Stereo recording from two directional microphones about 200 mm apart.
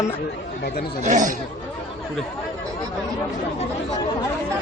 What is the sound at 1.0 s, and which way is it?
Speech, 40° right (ahead or behind).